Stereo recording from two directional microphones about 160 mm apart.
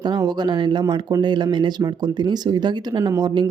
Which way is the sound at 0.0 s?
25° right (ahead or behind).